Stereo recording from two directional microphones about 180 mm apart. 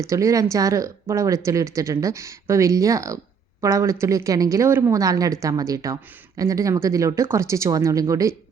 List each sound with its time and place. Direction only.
0.0 s a woman's voice: 15° right (ahead or behind)